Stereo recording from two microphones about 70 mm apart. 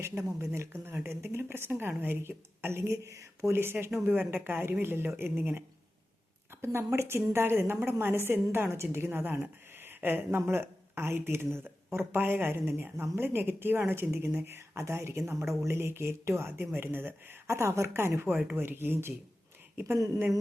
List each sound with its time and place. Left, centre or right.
0.3 s speech: right
3.5 s speech: right
6.6 s speech: right
17.4 s a woman's voice: right